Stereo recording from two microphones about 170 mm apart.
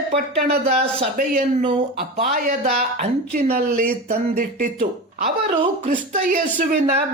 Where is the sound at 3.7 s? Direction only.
60° right (ahead or behind).